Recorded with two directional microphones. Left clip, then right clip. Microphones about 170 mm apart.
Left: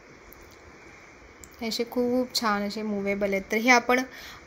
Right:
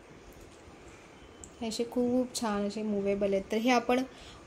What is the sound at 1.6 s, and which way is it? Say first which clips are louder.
A woman's voice: left 4 dB; centre (ahead or behind).